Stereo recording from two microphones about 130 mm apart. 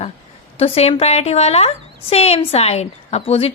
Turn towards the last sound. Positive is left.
turn(degrees=50)  # may be behind; listen again after turning